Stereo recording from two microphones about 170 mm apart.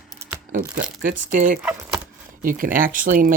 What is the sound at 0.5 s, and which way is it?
Speech, 55° right (ahead or behind).